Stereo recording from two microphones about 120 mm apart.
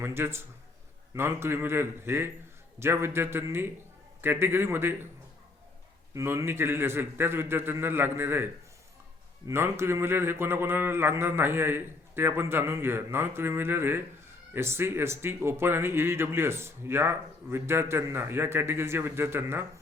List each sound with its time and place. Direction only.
0.0 s speech: 20° right (ahead or behind)
6.1 s speech: 20° right (ahead or behind)
9.5 s speech: 20° right (ahead or behind)